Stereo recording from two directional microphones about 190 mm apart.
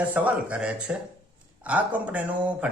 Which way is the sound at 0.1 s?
5° right (ahead or behind).